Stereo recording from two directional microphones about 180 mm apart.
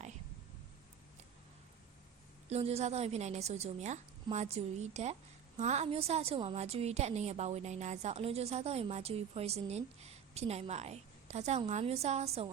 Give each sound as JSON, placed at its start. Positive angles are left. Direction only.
{"t": 2.5, "sound": "a woman's voice", "side_deg": -35}